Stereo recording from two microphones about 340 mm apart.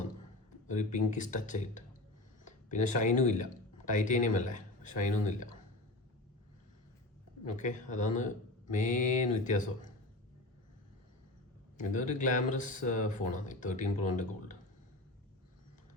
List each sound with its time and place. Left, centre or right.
0.7 s speech: left
7.4 s speech: left
11.8 s speech: left